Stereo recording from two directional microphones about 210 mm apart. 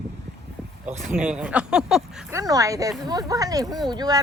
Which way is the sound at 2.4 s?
15° right (ahead or behind).